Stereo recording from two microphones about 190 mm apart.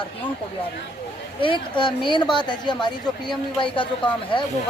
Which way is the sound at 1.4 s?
25° left (ahead or behind).